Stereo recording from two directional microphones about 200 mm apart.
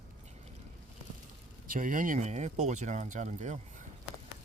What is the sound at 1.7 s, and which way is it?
Speech, 45° right (ahead or behind).